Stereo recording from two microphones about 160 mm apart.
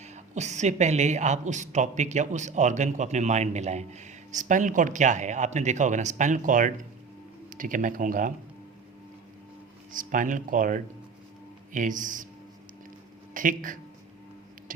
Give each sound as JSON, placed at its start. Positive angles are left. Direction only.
{"t": 0.0, "sound": "a woman's voice", "side_deg": -45}
{"t": 9.9, "sound": "speech", "side_deg": -55}
{"t": 13.3, "sound": "a man's voice", "side_deg": -55}